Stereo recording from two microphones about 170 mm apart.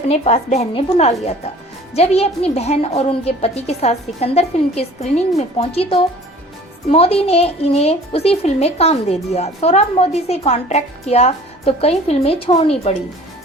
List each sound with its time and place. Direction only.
0.1 s speech: 40° left (ahead or behind)